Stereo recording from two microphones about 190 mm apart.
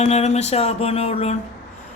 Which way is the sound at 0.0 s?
35° left (ahead or behind).